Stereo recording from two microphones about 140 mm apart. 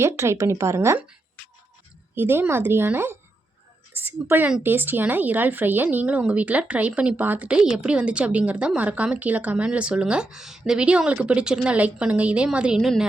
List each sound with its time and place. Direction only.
0.0 s a woman's voice: 20° right (ahead or behind)
2.1 s speech: 15° right (ahead or behind)